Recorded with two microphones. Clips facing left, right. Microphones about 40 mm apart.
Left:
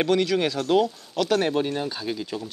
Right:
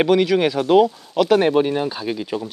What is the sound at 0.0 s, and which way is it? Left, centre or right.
Speech, centre.